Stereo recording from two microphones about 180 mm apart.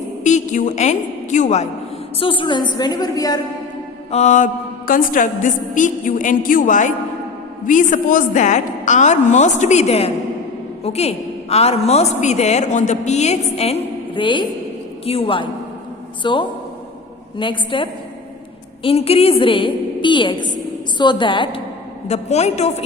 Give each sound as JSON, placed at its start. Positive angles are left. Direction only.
{"t": 0.3, "sound": "a woman's voice", "side_deg": 40}
{"t": 2.1, "sound": "a woman's voice", "side_deg": 30}
{"t": 4.1, "sound": "a woman's voice", "side_deg": 40}
{"t": 22.0, "sound": "a woman's voice", "side_deg": 40}